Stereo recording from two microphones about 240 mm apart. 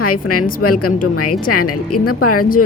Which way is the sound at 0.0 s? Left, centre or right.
Left.